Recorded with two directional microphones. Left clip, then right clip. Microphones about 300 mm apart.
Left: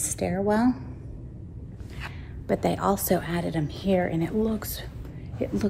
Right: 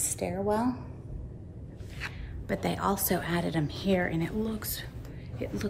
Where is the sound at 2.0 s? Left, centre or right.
Centre.